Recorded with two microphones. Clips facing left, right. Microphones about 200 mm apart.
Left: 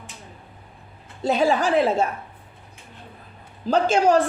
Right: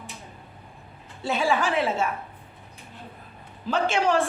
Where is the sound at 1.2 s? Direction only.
40° left (ahead or behind).